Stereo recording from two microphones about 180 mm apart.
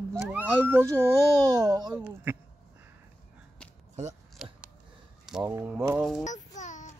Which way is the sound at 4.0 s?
40° right (ahead or behind).